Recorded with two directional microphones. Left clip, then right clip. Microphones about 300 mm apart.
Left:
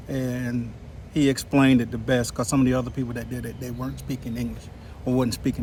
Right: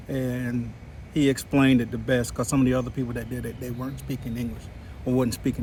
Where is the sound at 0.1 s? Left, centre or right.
Centre.